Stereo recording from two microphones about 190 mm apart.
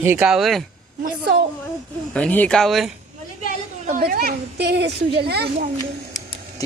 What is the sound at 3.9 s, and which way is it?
Speech, 50° right (ahead or behind).